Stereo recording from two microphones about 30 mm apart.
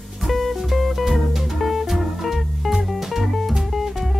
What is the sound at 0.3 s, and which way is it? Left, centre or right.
Music, centre.